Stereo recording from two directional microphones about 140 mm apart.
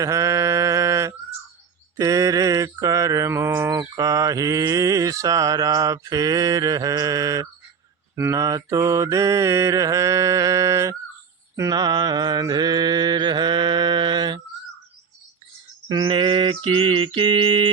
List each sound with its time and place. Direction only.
0.0 s mantra: 20° right (ahead or behind)
16.0 s mantra: 35° right (ahead or behind)